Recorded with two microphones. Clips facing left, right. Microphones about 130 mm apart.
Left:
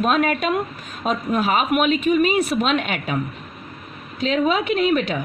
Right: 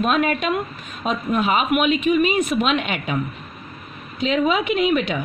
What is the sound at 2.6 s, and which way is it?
Speech, centre (ahead or behind).